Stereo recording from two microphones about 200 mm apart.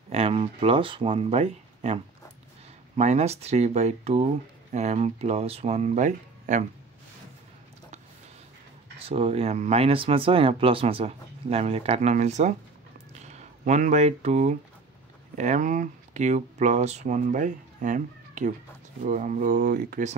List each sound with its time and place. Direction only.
0.1 s speech: 30° right (ahead or behind)
3.0 s speech: 35° right (ahead or behind)
8.9 s speech: 30° right (ahead or behind)